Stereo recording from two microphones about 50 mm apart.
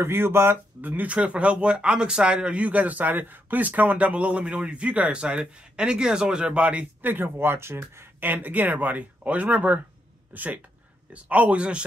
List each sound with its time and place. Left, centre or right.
0.0 s speech: right
0.7 s speech: right
7.0 s speech: right
8.3 s speech: right